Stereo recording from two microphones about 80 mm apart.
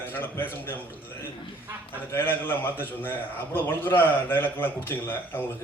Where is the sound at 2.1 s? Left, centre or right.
Left.